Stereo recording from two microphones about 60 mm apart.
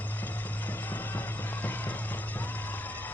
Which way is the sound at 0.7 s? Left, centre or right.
Left.